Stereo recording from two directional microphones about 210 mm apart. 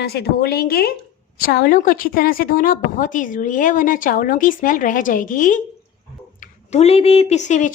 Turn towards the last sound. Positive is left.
turn(degrees=35)  # may be behind; listen again after turning